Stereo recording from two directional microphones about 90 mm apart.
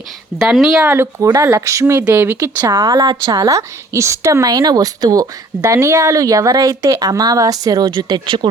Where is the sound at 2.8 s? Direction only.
55° right (ahead or behind).